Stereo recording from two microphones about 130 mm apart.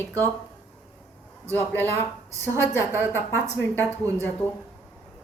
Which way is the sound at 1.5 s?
15° left (ahead or behind).